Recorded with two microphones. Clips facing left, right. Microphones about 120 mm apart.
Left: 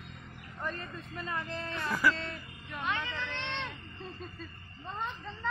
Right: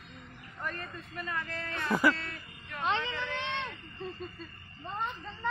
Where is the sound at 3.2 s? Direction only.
10° right (ahead or behind).